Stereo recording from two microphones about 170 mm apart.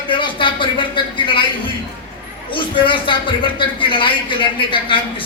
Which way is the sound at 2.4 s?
30° left (ahead or behind).